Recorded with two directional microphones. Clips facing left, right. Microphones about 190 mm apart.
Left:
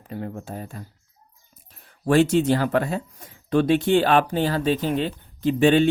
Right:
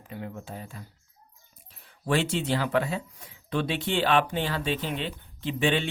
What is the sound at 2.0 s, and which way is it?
Speech, 45° left (ahead or behind).